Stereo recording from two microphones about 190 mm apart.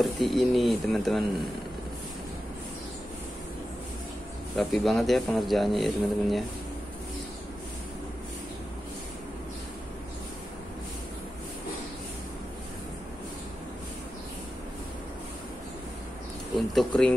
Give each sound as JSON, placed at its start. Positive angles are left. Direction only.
{"t": 0.0, "sound": "speech", "side_deg": 0}
{"t": 4.6, "sound": "speech", "side_deg": 0}
{"t": 16.5, "sound": "speech", "side_deg": 0}